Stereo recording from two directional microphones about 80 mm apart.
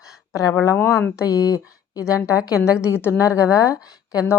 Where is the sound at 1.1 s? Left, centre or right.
Left.